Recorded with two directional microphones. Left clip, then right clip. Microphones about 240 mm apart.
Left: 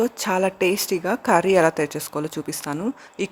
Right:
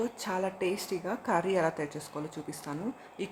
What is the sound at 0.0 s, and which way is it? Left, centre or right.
A woman's voice, left.